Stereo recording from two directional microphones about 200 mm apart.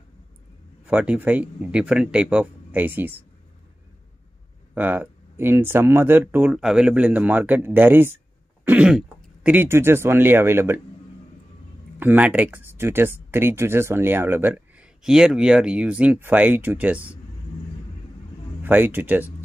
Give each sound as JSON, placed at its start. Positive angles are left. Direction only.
{"t": 0.8, "sound": "speech", "side_deg": -5}
{"t": 4.7, "sound": "speech", "side_deg": -10}
{"t": 12.0, "sound": "speech", "side_deg": -10}
{"t": 18.6, "sound": "speech", "side_deg": -10}